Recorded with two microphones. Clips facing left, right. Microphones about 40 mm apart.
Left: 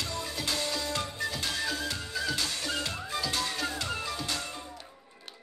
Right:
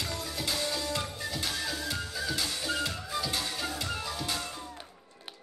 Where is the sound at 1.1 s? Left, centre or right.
Centre.